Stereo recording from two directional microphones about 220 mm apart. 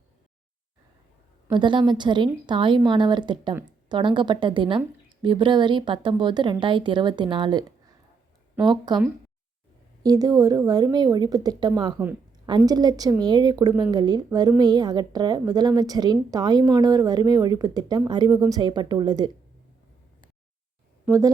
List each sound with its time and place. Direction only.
1.5 s a woman's voice: 20° right (ahead or behind)
10.0 s a woman's voice: 15° right (ahead or behind)
21.0 s speech: 15° right (ahead or behind)